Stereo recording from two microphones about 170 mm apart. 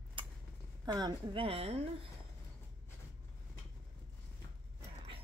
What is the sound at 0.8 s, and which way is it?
A woman's voice, 25° right (ahead or behind).